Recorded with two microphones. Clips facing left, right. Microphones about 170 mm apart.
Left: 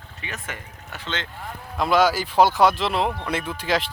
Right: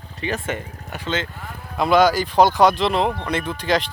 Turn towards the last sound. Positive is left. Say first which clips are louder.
# right 3 dB
turn(degrees=5)  # may be behind; listen again after turning